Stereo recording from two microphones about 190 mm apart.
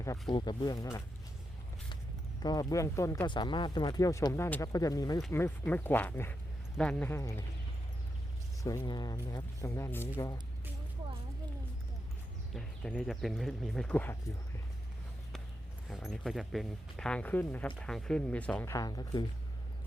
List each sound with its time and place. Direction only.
0.0 s speech: 20° left (ahead or behind)
2.4 s speech: 20° left (ahead or behind)
8.6 s speech: 20° left (ahead or behind)
12.5 s speech: centre (ahead or behind)
15.9 s speech: centre (ahead or behind); by 19.2 s 20° left (ahead or behind)